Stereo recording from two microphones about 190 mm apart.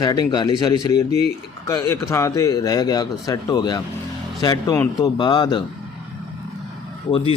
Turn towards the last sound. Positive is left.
turn(degrees=30)  # may be behind; listen again after turning